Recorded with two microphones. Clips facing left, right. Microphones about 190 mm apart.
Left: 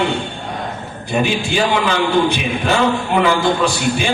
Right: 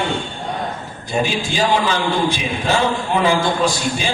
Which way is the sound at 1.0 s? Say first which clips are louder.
Left 2 dB; 65° left (ahead or behind).